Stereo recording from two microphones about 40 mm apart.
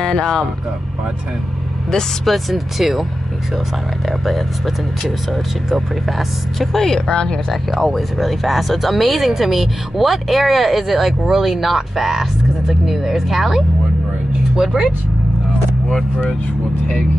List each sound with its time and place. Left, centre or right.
0.0 s speech: centre
2.2 s speech: centre
5.7 s speech: centre
7.1 s speech: centre
7.8 s speech: centre